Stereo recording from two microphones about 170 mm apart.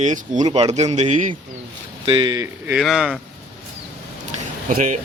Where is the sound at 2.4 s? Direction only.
5° right (ahead or behind).